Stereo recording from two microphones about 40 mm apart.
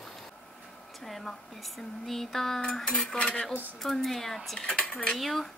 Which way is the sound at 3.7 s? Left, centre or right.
Centre.